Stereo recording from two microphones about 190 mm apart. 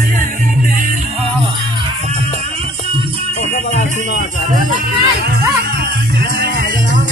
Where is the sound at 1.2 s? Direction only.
30° right (ahead or behind).